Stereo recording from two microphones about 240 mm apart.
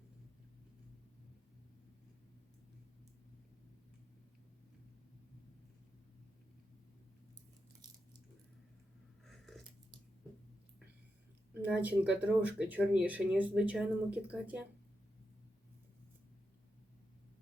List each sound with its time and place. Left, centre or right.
11.6 s speech: centre